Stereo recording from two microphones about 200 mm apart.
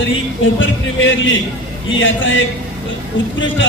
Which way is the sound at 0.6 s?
70° left (ahead or behind).